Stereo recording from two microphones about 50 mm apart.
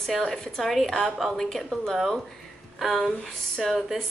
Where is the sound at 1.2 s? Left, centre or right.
Centre.